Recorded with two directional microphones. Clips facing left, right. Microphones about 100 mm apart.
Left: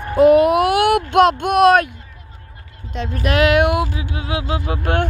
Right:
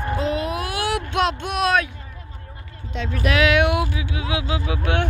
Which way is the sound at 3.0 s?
45° left (ahead or behind).